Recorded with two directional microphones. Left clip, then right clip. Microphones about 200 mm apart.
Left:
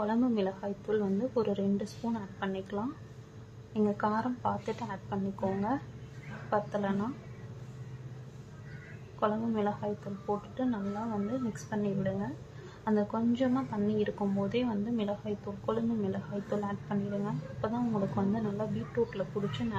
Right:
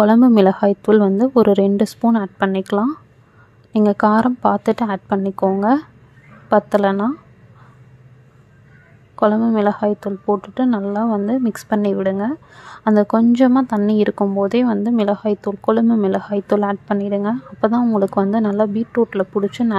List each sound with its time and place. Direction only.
0.0 s speech: 50° right (ahead or behind)
9.2 s speech: 50° right (ahead or behind)